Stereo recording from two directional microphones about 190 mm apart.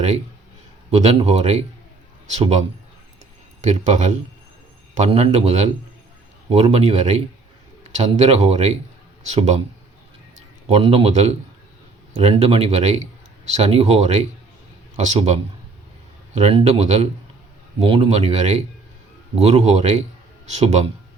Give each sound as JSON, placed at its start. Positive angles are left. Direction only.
{"t": 0.9, "sound": "speech", "side_deg": -35}
{"t": 3.6, "sound": "speech", "side_deg": -40}
{"t": 10.7, "sound": "speech", "side_deg": -30}